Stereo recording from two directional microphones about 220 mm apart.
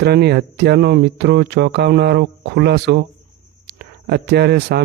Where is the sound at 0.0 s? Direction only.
50° right (ahead or behind).